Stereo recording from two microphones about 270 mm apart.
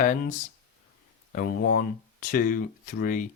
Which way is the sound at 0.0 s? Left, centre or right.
Left.